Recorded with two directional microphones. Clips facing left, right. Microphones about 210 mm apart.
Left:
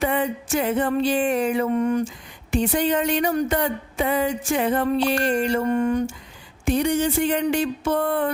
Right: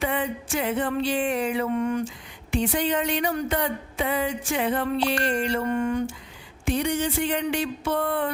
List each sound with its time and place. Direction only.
0.0 s speech: 45° left (ahead or behind)